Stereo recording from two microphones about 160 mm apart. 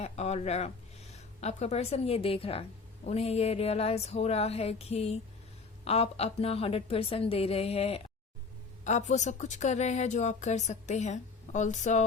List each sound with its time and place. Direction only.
0.0 s a woman's voice: 40° left (ahead or behind)